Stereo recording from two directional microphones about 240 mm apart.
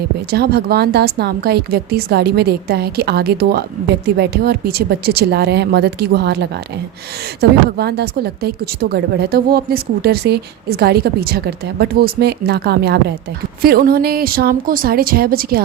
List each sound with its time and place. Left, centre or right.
0.3 s a woman's voice: right
7.8 s a woman's voice: right